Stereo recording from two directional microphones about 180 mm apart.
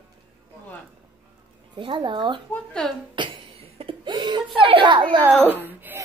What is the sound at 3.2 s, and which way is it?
Cough, 25° right (ahead or behind).